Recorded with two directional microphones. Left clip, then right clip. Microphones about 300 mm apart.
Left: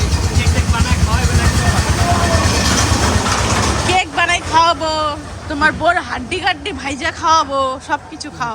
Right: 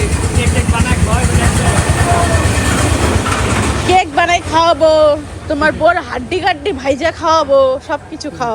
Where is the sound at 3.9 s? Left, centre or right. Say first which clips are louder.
Right 5 dB; centre.